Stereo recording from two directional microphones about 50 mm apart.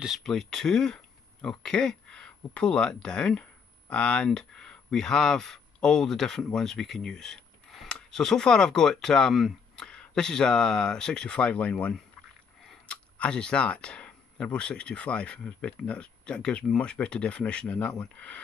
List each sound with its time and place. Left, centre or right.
0.2 s speech: centre; by 11.7 s left
12.8 s speech: left